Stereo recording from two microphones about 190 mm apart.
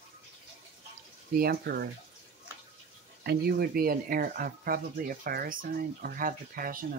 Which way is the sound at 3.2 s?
55° right (ahead or behind).